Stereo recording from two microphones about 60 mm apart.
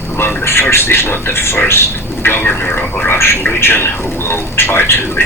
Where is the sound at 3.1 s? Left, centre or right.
Left.